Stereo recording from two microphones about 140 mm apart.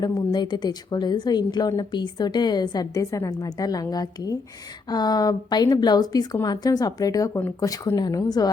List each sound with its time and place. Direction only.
0.0 s a woman's voice: 30° left (ahead or behind)